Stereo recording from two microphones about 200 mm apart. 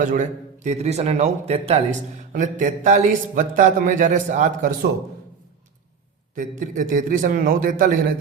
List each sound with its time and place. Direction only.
0.0 s a man's voice: 40° right (ahead or behind)
6.3 s a man's voice: 40° right (ahead or behind)